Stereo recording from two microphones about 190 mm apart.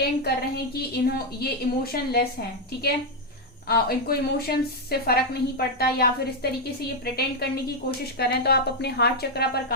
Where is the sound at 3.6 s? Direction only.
55° left (ahead or behind).